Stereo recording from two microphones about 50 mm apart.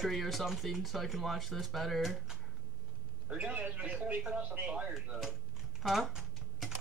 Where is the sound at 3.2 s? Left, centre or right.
Right.